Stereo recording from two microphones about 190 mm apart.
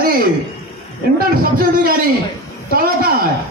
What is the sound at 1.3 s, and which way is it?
A man's voice, 50° right (ahead or behind).